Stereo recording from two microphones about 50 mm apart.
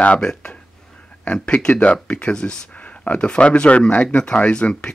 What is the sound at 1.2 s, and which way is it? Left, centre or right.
Speech, left.